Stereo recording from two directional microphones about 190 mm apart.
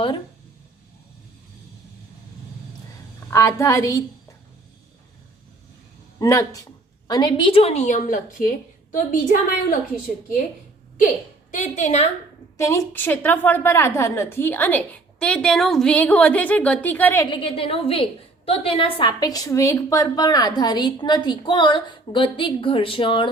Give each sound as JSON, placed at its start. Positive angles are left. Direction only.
{"t": 3.2, "sound": "a woman's voice", "side_deg": 15}
{"t": 6.1, "sound": "a woman's voice", "side_deg": 15}
{"t": 11.5, "sound": "a woman's voice", "side_deg": 40}
{"t": 12.5, "sound": "a woman's voice", "side_deg": 15}
{"t": 17.3, "sound": "a woman's voice", "side_deg": 30}